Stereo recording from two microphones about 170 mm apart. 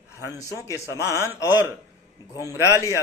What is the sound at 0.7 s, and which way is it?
Speech, 20° right (ahead or behind).